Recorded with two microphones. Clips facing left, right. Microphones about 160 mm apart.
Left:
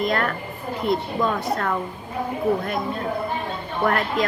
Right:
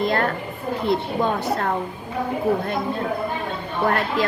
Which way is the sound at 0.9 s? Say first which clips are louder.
Even; 30° right (ahead or behind).